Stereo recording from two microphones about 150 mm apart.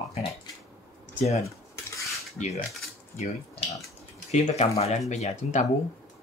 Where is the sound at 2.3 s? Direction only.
50° left (ahead or behind).